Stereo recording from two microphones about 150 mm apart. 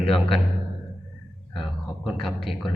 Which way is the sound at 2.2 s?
Centre (ahead or behind).